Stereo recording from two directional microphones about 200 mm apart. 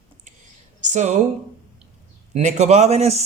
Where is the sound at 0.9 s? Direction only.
35° right (ahead or behind).